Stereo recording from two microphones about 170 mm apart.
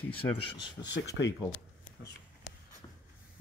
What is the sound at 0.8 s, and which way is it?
Speech, 90° left.